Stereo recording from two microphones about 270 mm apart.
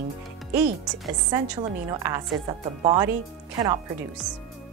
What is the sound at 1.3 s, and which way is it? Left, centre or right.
A woman's voice, centre.